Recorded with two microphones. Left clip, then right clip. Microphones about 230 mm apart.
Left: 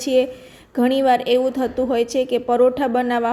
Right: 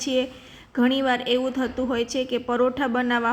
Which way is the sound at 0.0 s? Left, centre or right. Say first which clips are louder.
Left 7 dB; centre.